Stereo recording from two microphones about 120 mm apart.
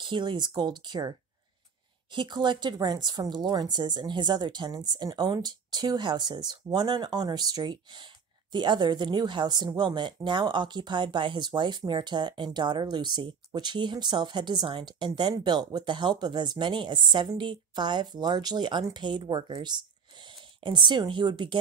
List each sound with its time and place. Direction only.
0.0 s speech: 40° right (ahead or behind)
2.1 s speech: 40° right (ahead or behind)